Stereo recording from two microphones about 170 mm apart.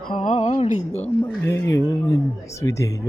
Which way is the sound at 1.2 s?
15° left (ahead or behind).